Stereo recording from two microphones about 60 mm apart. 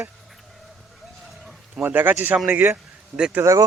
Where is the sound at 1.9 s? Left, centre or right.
Right.